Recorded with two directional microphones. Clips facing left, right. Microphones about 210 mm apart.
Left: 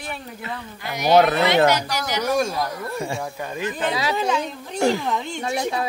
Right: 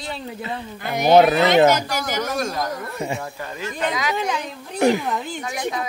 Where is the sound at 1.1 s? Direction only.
20° right (ahead or behind).